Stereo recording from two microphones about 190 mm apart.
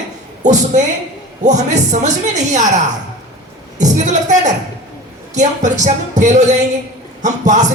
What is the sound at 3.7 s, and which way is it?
Speech, 40° right (ahead or behind).